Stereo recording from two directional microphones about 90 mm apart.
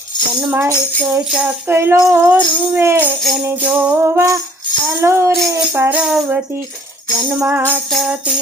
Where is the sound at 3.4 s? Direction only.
15° right (ahead or behind).